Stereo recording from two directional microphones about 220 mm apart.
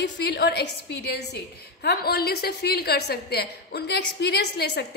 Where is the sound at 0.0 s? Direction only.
50° left (ahead or behind).